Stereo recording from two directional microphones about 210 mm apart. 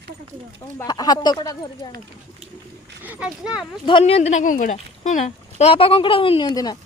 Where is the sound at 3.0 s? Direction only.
5° right (ahead or behind).